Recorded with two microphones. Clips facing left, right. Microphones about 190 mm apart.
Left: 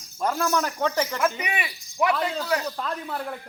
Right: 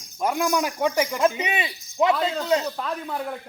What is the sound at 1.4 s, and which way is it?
Speech, 25° right (ahead or behind).